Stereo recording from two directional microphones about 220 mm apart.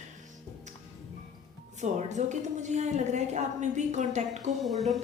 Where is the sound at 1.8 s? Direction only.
35° right (ahead or behind).